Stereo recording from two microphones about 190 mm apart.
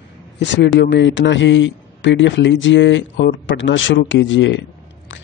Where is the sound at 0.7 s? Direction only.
65° left (ahead or behind).